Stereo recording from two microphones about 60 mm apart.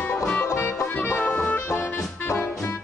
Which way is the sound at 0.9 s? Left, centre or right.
Left.